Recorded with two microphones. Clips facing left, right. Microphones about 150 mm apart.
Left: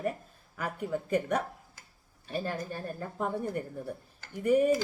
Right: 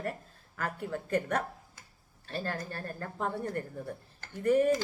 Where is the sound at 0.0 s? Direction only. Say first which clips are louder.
Left 4 dB; 15° left (ahead or behind).